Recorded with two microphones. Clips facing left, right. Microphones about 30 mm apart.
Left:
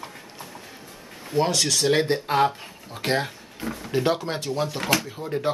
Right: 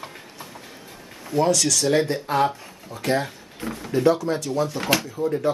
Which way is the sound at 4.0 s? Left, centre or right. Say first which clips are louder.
Right 4 dB; left.